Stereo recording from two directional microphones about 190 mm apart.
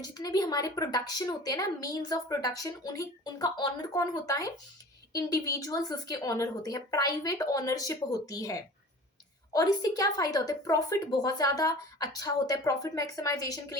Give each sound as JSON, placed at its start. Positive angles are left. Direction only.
{"t": 0.0, "sound": "a woman's voice", "side_deg": 20}